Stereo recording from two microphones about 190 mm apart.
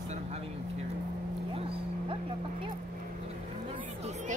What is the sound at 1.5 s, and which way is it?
Speech, 30° right (ahead or behind).